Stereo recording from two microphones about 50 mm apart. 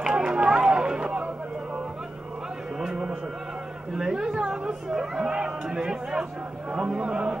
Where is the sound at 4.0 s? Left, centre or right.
Centre.